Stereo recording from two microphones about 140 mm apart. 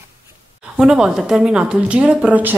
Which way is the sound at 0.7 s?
5° right (ahead or behind).